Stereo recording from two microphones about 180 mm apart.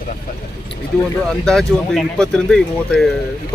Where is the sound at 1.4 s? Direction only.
5° left (ahead or behind).